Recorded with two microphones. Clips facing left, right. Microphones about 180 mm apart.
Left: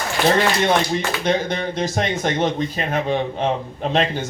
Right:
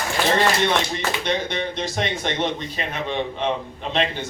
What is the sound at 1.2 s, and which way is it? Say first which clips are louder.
Speech: left 5 dB; 45° left (ahead or behind).